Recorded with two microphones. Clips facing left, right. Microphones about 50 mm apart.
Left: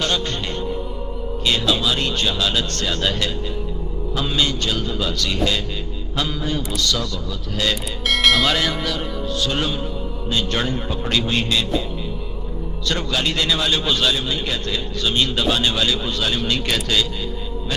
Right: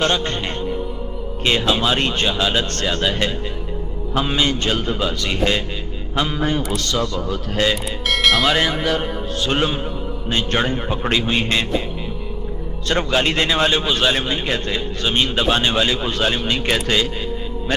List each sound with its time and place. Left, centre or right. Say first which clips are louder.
0.0 s a man's voice: right 3 dB; right
4.1 s a man's voice: right 3 dB; right
6.7 s a man's voice: right 2 dB; right
7.2 s a man's voice: right 5 dB; right
7.9 s speech: even; centre
8.6 s a man's voice: right 2 dB; right
8.9 s a man's voice: right 3 dB; right
11.2 s a man's voice: right 1 dB; centre
11.4 s a man's voice: right 1 dB; right
12.8 s a man's voice: right 4 dB; right
16.4 s a man's voice: right 2 dB; right